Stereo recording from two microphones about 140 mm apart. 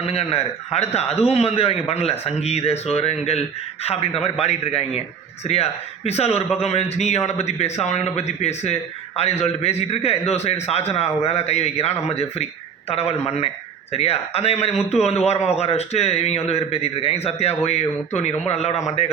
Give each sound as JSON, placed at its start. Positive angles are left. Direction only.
{"t": 0.0, "sound": "a man's voice", "side_deg": 45}